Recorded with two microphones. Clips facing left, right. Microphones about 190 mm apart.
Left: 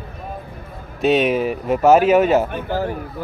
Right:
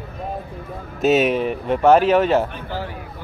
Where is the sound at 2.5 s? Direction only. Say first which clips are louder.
Left 7 dB; 45° left (ahead or behind).